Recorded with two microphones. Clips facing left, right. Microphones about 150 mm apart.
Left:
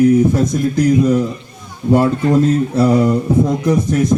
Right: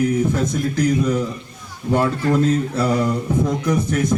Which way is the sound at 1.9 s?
30° left (ahead or behind).